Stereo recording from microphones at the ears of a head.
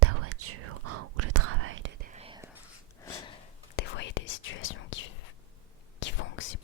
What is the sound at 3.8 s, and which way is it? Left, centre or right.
Whispering, left.